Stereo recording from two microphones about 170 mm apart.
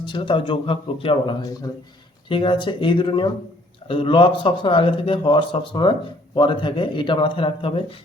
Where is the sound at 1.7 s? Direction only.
20° left (ahead or behind).